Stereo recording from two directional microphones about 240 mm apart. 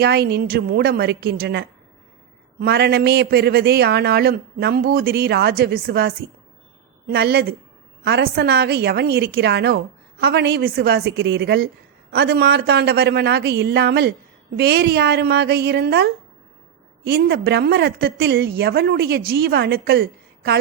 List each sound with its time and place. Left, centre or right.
0.0 s a woman's voice: right